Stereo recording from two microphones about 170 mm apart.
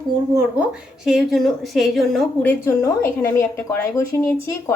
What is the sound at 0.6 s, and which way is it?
A woman's voice, 5° right (ahead or behind).